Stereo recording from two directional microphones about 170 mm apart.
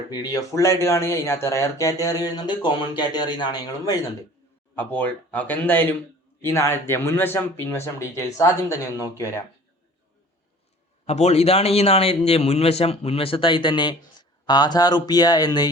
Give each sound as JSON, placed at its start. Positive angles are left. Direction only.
{"t": 0.1, "sound": "speech", "side_deg": 25}
{"t": 4.7, "sound": "speech", "side_deg": 10}
{"t": 11.0, "sound": "a man's voice", "side_deg": 40}